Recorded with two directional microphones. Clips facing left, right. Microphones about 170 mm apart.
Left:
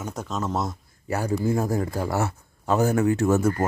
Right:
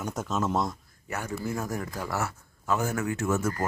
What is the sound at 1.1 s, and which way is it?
Speech, 30° left (ahead or behind).